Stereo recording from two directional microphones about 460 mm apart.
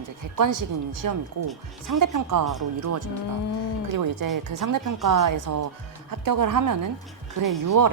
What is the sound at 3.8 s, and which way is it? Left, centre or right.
Speech, right.